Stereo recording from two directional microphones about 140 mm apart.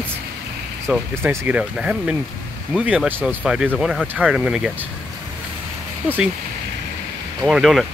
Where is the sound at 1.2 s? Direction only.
15° right (ahead or behind).